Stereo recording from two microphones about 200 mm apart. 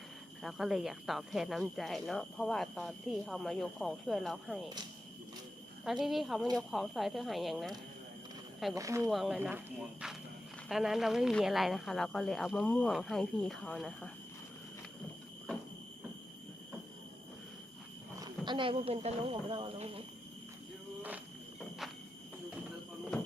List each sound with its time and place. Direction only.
0.4 s speech: centre (ahead or behind)
5.8 s speech: centre (ahead or behind)
8.7 s speech: 15° right (ahead or behind)
9.0 s speech: centre (ahead or behind)
18.2 s speech: 20° right (ahead or behind)